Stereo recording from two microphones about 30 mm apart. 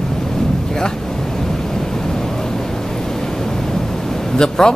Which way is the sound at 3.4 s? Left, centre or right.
Centre.